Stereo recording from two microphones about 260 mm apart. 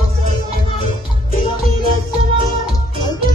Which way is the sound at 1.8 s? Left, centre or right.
Right.